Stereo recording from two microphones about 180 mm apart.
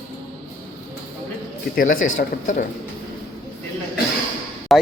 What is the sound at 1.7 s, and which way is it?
Speech, 50° left (ahead or behind).